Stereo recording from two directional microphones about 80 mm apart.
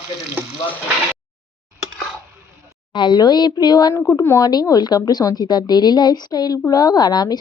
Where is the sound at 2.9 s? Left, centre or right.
Left.